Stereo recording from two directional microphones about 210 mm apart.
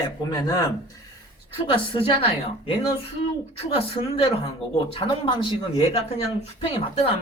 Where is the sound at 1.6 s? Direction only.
25° left (ahead or behind).